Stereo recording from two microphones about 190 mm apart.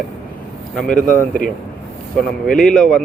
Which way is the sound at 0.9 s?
45° left (ahead or behind).